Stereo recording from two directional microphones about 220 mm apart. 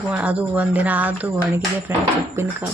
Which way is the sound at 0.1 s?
5° right (ahead or behind).